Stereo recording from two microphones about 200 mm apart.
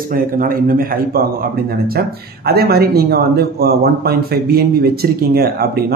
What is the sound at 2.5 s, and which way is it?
A man's voice, 50° right (ahead or behind).